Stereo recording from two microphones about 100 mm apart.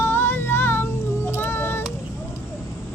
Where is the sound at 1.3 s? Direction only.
20° left (ahead or behind).